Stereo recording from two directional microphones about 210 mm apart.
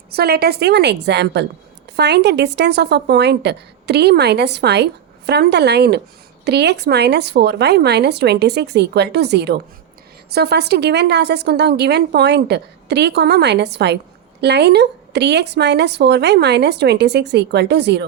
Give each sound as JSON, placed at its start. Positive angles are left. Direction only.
{"t": 0.1, "sound": "a woman's voice", "side_deg": -50}